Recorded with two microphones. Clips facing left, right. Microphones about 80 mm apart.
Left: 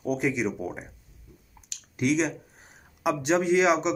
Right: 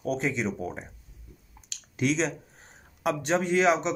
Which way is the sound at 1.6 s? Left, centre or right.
Centre.